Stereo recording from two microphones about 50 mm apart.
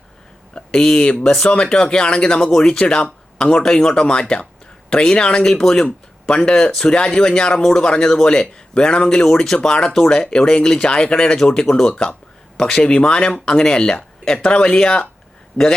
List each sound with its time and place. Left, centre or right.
0.5 s speech: centre